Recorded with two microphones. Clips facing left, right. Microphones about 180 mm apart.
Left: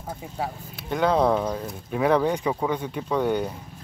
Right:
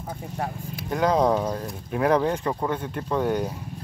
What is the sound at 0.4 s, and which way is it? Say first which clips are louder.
Speech: right 1 dB; centre (ahead or behind).